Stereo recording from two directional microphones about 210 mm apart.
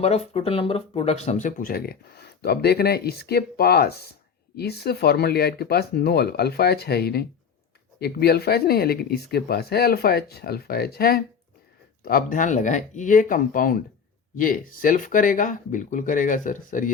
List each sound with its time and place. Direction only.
0.0 s speech: 30° left (ahead or behind)